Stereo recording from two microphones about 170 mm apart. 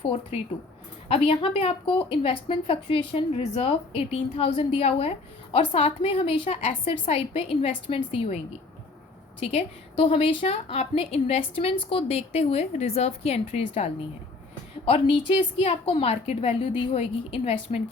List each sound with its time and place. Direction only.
1.0 s a woman's voice: 35° left (ahead or behind)
9.4 s a woman's voice: 35° left (ahead or behind)